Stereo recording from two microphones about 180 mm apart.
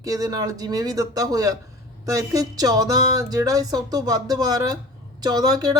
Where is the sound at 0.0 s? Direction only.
20° right (ahead or behind).